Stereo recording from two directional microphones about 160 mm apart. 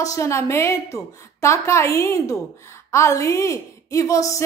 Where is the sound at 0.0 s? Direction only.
20° left (ahead or behind).